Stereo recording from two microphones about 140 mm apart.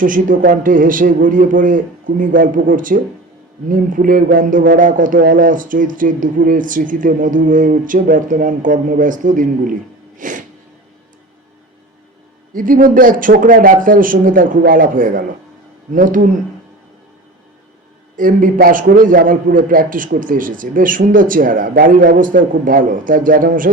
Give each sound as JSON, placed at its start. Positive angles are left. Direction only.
{"t": 0.0, "sound": "a man's voice", "side_deg": -75}
{"t": 10.2, "sound": "a sound", "side_deg": -70}
{"t": 12.5, "sound": "a man's voice", "side_deg": -80}
{"t": 18.2, "sound": "a man's voice", "side_deg": -75}